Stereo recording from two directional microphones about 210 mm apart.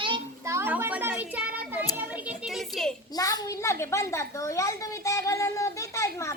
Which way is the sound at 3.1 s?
20° left (ahead or behind).